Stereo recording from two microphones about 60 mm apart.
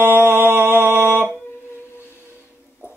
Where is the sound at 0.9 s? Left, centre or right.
Left.